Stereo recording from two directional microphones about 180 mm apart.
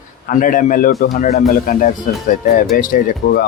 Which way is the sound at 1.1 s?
45° left (ahead or behind).